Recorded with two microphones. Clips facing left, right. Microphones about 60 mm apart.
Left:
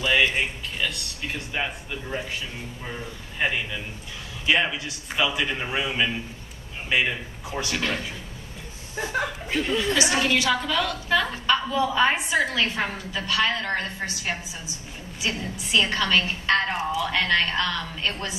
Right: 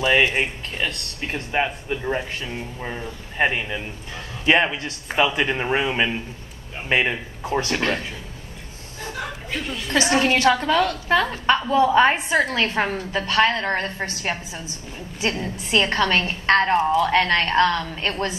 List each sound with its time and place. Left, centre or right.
0.0 s a woman's voice: right
3.4 s a woman's voice: right
9.9 s a woman's voice: right
15.2 s a woman's voice: right